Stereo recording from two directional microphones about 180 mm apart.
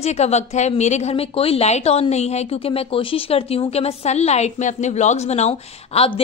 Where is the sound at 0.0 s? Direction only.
40° left (ahead or behind).